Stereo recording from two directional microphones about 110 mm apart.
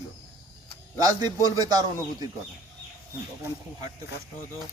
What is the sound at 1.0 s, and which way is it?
Speech, 35° right (ahead or behind).